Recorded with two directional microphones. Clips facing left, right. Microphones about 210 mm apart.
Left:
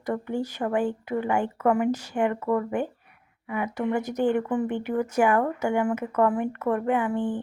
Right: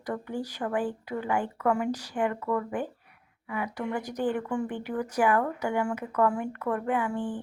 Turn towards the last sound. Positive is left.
turn(degrees=20)  # may be behind; listen again after turning